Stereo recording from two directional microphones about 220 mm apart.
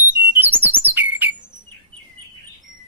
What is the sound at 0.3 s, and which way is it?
Alarm, 10° right (ahead or behind).